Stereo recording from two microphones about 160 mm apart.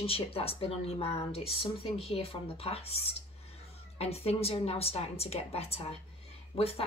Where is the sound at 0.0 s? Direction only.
35° left (ahead or behind).